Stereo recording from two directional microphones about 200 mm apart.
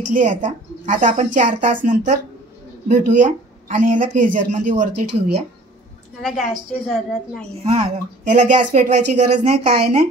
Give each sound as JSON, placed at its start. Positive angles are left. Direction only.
{"t": 0.1, "sound": "speech", "side_deg": -40}
{"t": 6.2, "sound": "a woman's voice", "side_deg": 0}
{"t": 7.6, "sound": "speech", "side_deg": -35}